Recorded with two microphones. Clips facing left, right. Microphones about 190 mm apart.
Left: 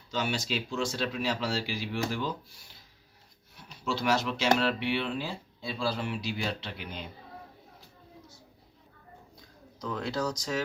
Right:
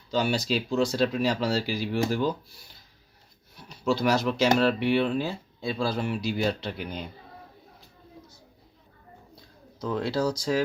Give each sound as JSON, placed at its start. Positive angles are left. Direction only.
{"t": 0.1, "sound": "speech", "side_deg": -35}
{"t": 3.7, "sound": "speech", "side_deg": -40}
{"t": 9.8, "sound": "speech", "side_deg": -30}